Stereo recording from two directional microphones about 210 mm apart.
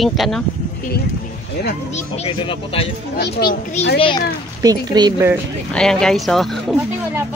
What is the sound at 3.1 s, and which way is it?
Speech, 45° left (ahead or behind).